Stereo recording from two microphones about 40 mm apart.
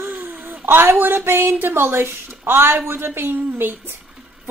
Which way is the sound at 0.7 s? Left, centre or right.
Right.